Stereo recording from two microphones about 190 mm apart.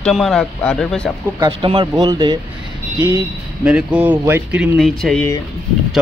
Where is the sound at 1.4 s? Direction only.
25° right (ahead or behind).